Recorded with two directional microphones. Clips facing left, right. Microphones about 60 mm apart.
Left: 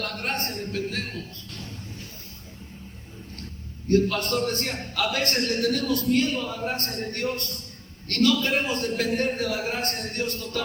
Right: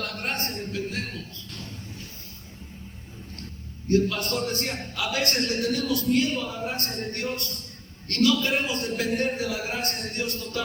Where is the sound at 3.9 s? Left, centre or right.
Left.